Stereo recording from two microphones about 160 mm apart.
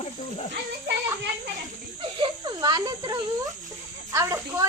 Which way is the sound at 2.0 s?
30° right (ahead or behind).